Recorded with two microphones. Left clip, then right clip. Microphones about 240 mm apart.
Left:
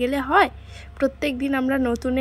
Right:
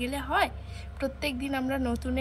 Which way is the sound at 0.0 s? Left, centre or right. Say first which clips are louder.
Left 9 dB; centre.